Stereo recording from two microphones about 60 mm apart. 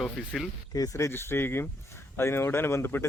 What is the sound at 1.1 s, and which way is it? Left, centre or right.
Speech, left.